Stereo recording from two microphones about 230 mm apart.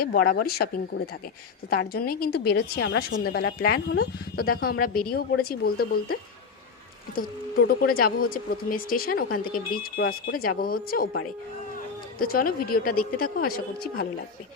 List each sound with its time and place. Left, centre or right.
0.0 s a woman's voice: left
7.2 s speech: left
12.2 s speech: left